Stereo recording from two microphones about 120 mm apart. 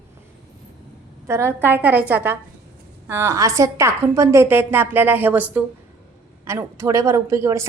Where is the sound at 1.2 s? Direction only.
20° right (ahead or behind).